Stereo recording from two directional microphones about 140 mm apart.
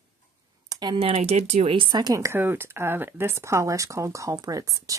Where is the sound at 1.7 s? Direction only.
35° right (ahead or behind).